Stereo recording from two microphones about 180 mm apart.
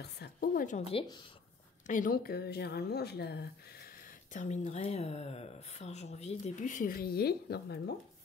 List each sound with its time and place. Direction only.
0.0 s a woman's voice: 60° left (ahead or behind); by 1.0 s 35° left (ahead or behind)
1.9 s speech: 50° left (ahead or behind); by 3.9 s 65° left (ahead or behind)
4.3 s a woman's voice: 40° left (ahead or behind); by 7.9 s 65° left (ahead or behind)